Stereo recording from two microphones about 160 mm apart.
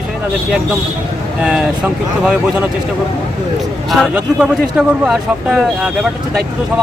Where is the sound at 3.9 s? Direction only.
5° right (ahead or behind).